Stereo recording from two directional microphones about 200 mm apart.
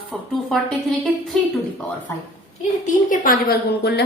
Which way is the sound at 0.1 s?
5° left (ahead or behind).